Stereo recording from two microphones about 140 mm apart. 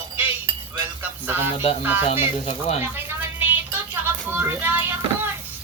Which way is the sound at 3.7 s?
15° right (ahead or behind).